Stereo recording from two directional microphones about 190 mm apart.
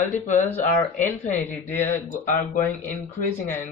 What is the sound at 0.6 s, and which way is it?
Speech, 40° left (ahead or behind).